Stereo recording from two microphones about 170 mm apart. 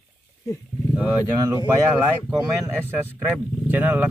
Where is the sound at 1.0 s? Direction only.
20° left (ahead or behind).